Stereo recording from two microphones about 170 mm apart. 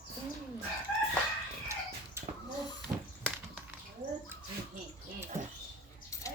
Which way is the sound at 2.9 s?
30° right (ahead or behind).